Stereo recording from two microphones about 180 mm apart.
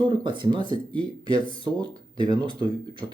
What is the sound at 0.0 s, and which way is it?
Speech, 25° right (ahead or behind).